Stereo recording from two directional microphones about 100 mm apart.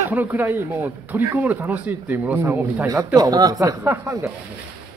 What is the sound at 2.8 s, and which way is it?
Speech, 35° right (ahead or behind).